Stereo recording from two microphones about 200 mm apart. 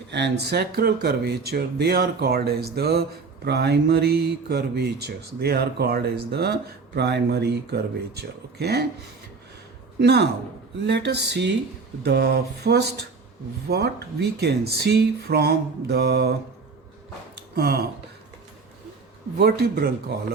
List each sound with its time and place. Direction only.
0.1 s speech: 60° right (ahead or behind)
10.0 s speech: 55° right (ahead or behind)
17.5 s speech: 50° right (ahead or behind)
19.4 s speech: 50° right (ahead or behind)